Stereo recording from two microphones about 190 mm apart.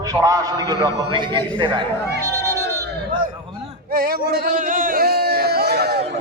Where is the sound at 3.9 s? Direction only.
50° right (ahead or behind).